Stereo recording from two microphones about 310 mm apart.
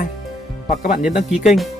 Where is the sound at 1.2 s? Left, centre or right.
Centre.